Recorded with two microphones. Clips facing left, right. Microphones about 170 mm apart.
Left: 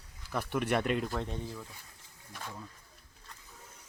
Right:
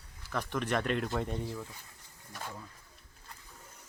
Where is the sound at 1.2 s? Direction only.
5° right (ahead or behind).